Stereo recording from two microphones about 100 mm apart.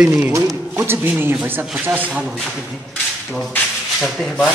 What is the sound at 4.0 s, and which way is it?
Speech, 5° left (ahead or behind).